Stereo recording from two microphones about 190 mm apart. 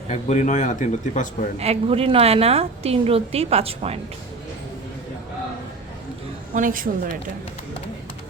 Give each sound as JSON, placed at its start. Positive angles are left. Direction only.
{"t": 0.1, "sound": "a man's voice", "side_deg": 40}
{"t": 1.5, "sound": "a woman's voice", "side_deg": -35}
{"t": 6.5, "sound": "a woman's voice", "side_deg": -45}